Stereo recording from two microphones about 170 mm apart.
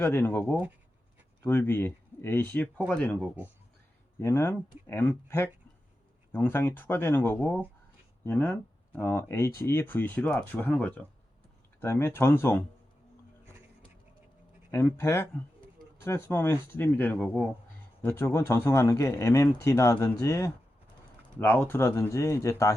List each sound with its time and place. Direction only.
0.1 s speech: 10° left (ahead or behind)
2.7 s speech: centre (ahead or behind)
14.7 s speech: 15° left (ahead or behind)